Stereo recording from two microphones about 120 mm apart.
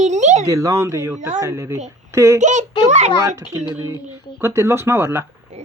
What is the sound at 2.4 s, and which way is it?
Speech, 85° right.